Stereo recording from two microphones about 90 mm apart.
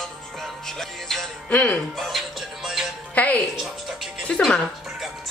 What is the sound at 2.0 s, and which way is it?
Music, centre (ahead or behind).